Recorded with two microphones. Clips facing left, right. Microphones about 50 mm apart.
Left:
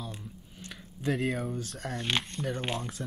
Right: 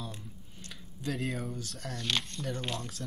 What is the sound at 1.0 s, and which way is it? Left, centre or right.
Speech, left.